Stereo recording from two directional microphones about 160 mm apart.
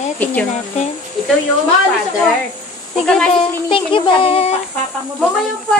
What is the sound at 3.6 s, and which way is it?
Speech, 30° left (ahead or behind).